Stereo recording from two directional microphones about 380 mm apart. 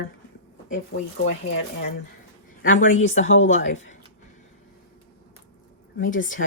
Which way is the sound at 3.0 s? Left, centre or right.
Left.